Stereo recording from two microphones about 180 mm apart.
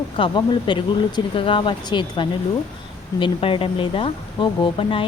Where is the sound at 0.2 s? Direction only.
25° left (ahead or behind).